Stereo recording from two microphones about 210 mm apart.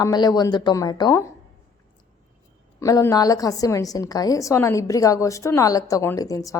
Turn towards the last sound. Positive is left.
turn(degrees=15)  # may be behind; listen again after turning